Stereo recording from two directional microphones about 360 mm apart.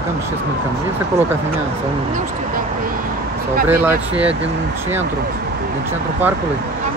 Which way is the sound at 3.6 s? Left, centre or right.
Centre.